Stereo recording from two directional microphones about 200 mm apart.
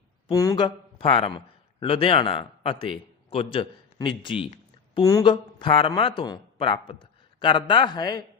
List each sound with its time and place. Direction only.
0.3 s a man's voice: 20° left (ahead or behind)